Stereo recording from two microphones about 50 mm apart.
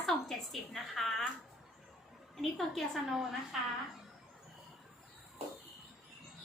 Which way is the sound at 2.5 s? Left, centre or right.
Centre.